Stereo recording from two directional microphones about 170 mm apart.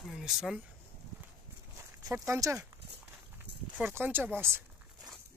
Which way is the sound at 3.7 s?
10° right (ahead or behind).